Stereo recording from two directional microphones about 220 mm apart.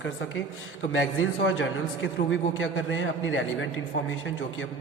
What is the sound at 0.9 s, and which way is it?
A man's voice, 60° left (ahead or behind).